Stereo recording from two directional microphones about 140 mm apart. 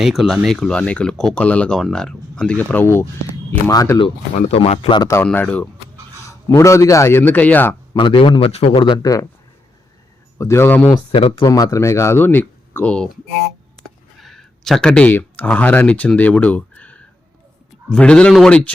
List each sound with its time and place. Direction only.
0.0 s speech: centre (ahead or behind); by 4.0 s 25° left (ahead or behind)
4.0 s speech: 45° left (ahead or behind)
5.2 s speech: 10° left (ahead or behind)
6.2 s speech: 20° left (ahead or behind)
7.9 s a man's voice: 35° left (ahead or behind)
10.3 s speech: 20° left (ahead or behind)
10.8 s speech: 40° left (ahead or behind); by 18.7 s 5° left (ahead or behind)